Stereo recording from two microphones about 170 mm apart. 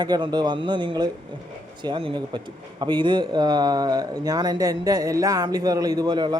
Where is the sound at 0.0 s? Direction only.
25° right (ahead or behind).